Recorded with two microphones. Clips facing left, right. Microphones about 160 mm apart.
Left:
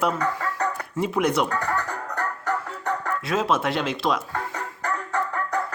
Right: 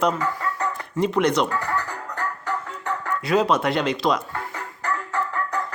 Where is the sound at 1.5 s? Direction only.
45° left (ahead or behind).